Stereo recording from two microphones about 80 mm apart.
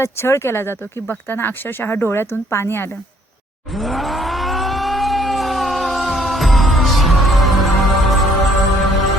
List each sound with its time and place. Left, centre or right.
0.0 s speech: left
3.8 s vehicle: centre